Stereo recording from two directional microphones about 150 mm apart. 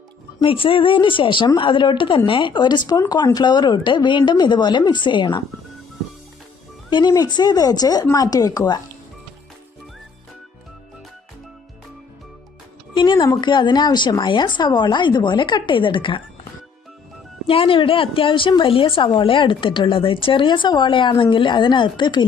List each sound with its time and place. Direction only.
0.3 s speech: 35° left (ahead or behind)
6.9 s speech: 25° left (ahead or behind)
12.9 s speech: 30° left (ahead or behind)
17.4 s speech: 40° left (ahead or behind)